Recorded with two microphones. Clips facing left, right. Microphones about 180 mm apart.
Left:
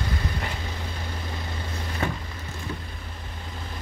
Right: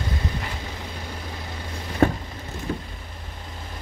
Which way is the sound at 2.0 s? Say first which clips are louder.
Right 10 dB; 50° right (ahead or behind).